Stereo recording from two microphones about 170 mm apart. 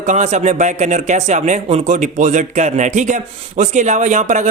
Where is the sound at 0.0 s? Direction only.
40° right (ahead or behind).